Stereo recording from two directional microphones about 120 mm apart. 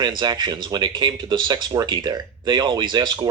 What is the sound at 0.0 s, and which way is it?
Speech, 35° right (ahead or behind).